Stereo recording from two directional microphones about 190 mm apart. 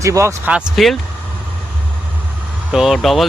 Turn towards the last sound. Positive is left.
turn(degrees=0)  # may be behind; listen again after turning